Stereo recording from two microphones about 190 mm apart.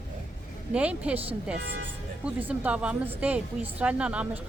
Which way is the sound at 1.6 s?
60° right (ahead or behind).